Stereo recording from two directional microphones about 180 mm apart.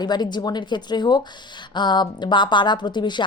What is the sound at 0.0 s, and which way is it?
Speech, 25° left (ahead or behind).